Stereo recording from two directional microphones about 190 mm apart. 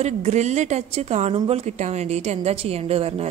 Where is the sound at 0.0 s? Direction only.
35° right (ahead or behind).